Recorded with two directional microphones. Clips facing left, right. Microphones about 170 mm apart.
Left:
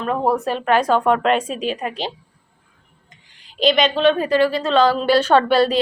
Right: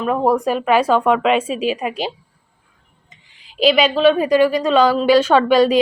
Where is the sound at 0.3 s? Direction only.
10° right (ahead or behind).